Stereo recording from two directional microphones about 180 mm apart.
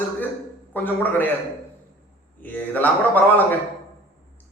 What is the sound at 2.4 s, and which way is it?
Speech, 10° left (ahead or behind).